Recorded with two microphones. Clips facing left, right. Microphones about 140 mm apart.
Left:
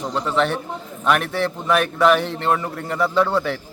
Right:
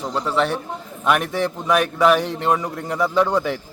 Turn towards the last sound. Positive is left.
turn(degrees=-15)  # may be behind; listen again after turning